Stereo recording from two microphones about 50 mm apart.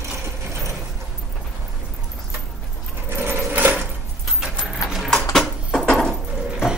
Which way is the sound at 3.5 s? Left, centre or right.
Right.